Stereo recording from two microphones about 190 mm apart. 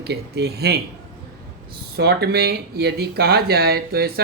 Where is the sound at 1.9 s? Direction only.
60° right (ahead or behind).